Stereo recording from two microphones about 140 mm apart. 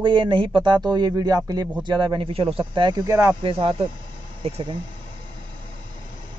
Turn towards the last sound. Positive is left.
turn(degrees=-45)  # may be behind; listen again after turning